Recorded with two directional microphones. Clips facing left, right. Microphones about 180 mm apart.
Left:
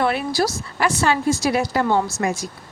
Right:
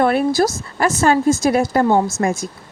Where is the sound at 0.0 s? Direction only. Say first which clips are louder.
Right 5 dB; 50° right (ahead or behind).